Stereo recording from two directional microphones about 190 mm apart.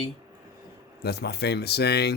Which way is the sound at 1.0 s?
60° left (ahead or behind).